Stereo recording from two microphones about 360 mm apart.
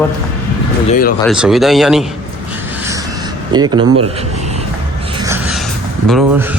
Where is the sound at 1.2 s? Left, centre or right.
Centre.